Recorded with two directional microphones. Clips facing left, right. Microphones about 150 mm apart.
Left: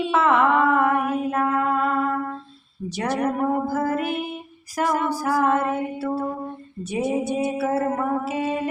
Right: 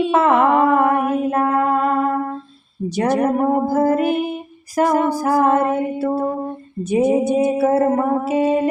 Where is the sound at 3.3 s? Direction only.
35° right (ahead or behind).